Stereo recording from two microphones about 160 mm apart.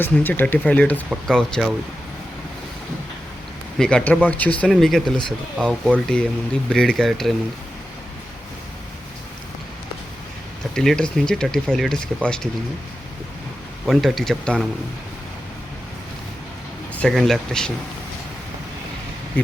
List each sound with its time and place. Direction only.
0.0 s speech: 10° left (ahead or behind)
3.8 s speech: 5° left (ahead or behind)
10.8 s speech: 5° left (ahead or behind)
13.8 s speech: centre (ahead or behind)
16.9 s speech: 5° left (ahead or behind)